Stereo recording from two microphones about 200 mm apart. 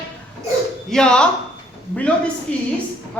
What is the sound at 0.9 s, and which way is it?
Speech, 5° left (ahead or behind).